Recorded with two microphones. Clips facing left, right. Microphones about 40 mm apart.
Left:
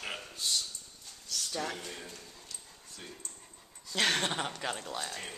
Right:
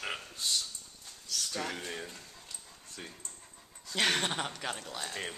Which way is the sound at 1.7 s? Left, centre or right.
Right.